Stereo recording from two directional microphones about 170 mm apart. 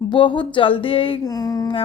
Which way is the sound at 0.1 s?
30° left (ahead or behind).